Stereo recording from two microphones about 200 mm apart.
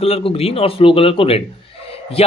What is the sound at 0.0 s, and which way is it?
Speech, 30° left (ahead or behind).